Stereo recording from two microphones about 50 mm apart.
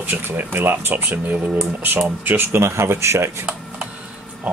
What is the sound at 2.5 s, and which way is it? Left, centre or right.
Speech, right.